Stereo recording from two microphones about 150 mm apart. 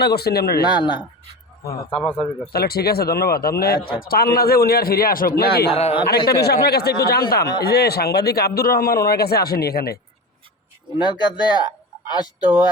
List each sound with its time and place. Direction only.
0.0 s a man's voice: 90° left
0.7 s speech: 30° left (ahead or behind)
2.5 s a man's voice: 90° left
3.8 s speech: 35° left (ahead or behind)
4.0 s a man's voice: 85° left
5.4 s a man's voice: 90° left
5.7 s speech: 40° left (ahead or behind)
6.1 s a man's voice: 90° left
11.0 s speech: 30° left (ahead or behind)